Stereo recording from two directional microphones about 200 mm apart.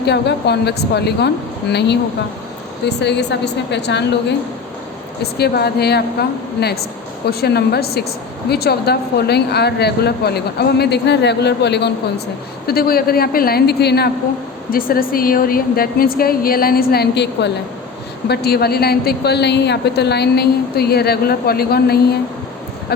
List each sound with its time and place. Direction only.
0.0 s a woman's voice: 55° left (ahead or behind)